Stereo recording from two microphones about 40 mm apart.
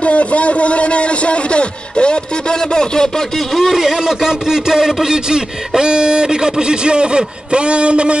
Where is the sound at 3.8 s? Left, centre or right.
Centre.